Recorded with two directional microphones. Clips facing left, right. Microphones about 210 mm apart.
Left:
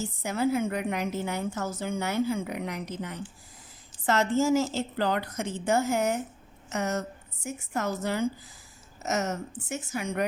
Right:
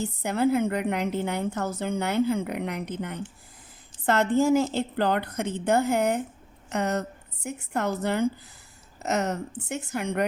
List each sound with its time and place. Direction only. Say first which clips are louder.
0.0 s a woman's voice: right 3 dB; 60° right (ahead or behind)